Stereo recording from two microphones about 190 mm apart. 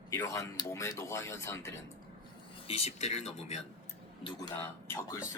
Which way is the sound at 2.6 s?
30° left (ahead or behind).